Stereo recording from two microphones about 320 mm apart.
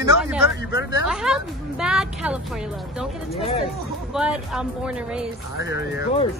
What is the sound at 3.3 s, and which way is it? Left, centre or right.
Speech, centre.